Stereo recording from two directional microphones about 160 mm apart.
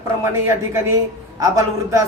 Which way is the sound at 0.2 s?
15° right (ahead or behind).